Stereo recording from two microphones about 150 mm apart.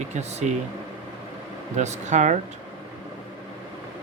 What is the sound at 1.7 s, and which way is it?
Speech, 50° right (ahead or behind).